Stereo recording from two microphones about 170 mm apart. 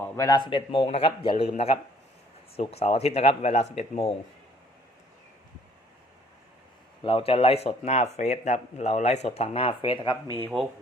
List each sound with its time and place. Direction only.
0.0 s speech: 20° left (ahead or behind); by 4.1 s 35° left (ahead or behind)
7.0 s speech: 30° left (ahead or behind)